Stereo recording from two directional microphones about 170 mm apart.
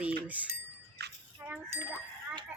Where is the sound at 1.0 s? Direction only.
75° right (ahead or behind).